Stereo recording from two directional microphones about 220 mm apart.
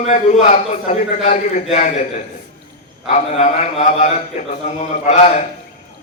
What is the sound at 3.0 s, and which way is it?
A man's voice, 30° left (ahead or behind).